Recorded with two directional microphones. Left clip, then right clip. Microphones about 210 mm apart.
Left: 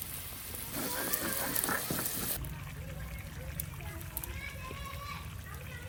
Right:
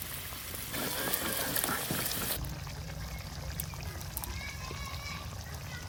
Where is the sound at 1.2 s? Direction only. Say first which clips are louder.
Right 1 dB; centre (ahead or behind).